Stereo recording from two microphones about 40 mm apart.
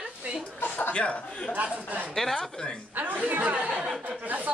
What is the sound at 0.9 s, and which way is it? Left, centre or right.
Speech, left.